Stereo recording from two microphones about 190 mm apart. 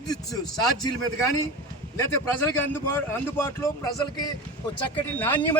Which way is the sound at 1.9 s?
15° left (ahead or behind).